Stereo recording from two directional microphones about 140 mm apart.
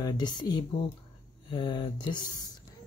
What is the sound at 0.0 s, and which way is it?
Speech, 30° left (ahead or behind).